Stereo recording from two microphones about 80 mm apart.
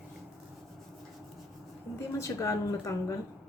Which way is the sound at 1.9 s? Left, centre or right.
Left.